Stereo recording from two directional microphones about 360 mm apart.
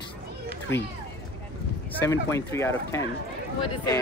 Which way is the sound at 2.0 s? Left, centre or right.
Centre.